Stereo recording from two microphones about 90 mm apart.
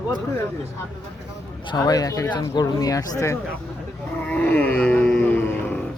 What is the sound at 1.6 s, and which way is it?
Speech, 45° left (ahead or behind).